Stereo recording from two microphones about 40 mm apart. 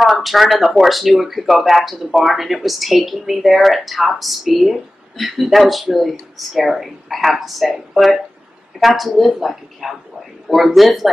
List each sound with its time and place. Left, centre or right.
0.0 s speech: centre